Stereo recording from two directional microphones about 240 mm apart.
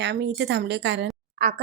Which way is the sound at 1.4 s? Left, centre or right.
Right.